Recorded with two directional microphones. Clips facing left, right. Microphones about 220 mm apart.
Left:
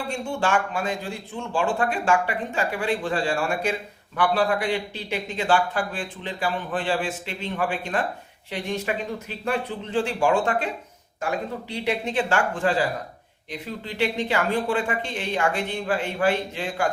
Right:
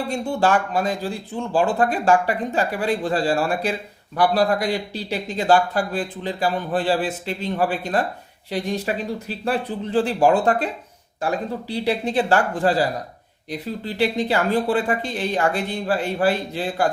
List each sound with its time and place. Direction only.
0.1 s a man's voice: 35° right (ahead or behind)